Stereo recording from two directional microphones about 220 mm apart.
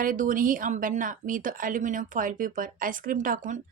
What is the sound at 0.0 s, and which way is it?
A woman's voice, 40° right (ahead or behind).